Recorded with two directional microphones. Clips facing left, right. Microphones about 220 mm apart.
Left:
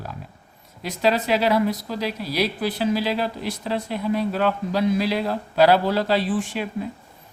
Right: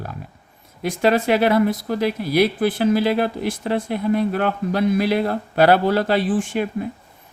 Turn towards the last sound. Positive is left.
turn(degrees=-50)  # may be behind; listen again after turning